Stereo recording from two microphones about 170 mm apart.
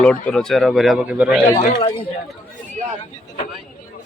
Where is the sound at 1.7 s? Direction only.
30° left (ahead or behind).